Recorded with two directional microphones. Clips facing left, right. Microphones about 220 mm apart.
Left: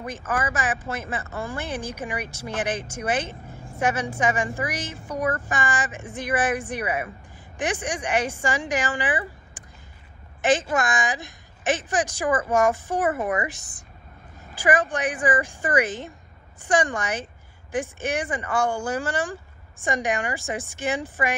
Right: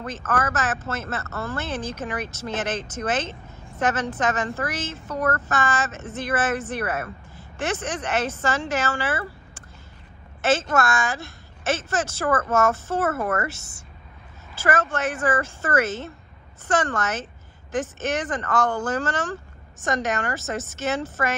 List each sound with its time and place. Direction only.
0.0 s speech: 10° left (ahead or behind)